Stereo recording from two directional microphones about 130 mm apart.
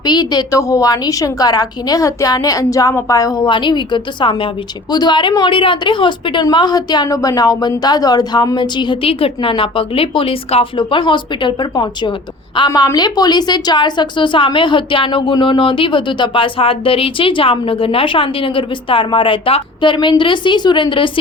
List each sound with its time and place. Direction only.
0.0 s a woman's voice: 35° left (ahead or behind)